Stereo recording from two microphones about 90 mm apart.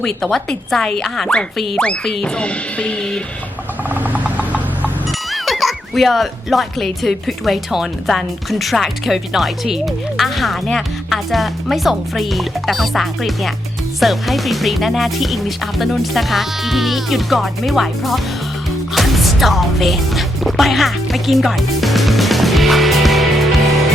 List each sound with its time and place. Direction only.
0.0 s speech: 5° left (ahead or behind)
1.8 s music: 10° left (ahead or behind)
3.8 s a sound: 20° right (ahead or behind)
5.3 s speech: centre (ahead or behind)
18.9 s music: centre (ahead or behind)